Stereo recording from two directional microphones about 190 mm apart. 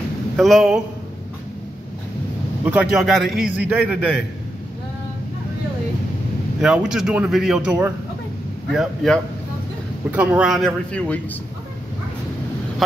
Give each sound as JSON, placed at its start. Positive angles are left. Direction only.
{"t": 0.4, "sound": "a man's voice", "side_deg": 0}
{"t": 2.6, "sound": "a man's voice", "side_deg": -5}
{"t": 6.6, "sound": "a man's voice", "side_deg": -5}